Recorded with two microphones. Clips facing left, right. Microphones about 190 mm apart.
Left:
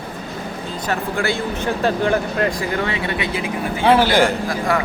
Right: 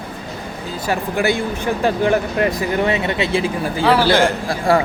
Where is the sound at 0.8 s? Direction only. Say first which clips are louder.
Right 3 dB; 15° right (ahead or behind).